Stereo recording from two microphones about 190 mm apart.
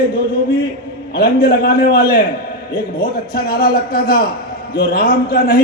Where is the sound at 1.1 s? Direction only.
55° left (ahead or behind).